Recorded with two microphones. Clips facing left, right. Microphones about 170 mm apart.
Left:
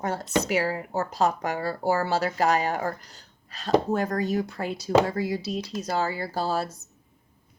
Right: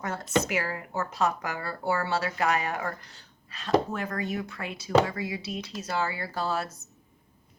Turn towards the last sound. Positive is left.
turn(degrees=30)  # may be behind; listen again after turning